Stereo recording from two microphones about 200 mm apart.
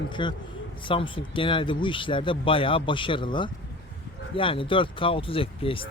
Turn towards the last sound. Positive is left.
turn(degrees=25)  # may be behind; listen again after turning